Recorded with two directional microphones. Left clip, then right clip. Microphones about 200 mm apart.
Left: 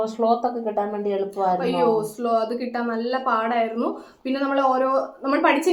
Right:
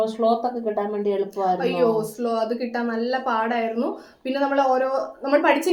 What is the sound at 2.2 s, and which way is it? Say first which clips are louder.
Speech: left 1 dB; 10° right (ahead or behind).